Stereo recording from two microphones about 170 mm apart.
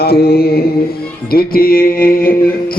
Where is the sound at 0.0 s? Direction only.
65° left (ahead or behind).